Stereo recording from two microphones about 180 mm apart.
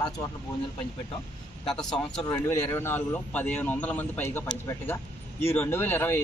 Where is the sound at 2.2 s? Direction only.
15° left (ahead or behind).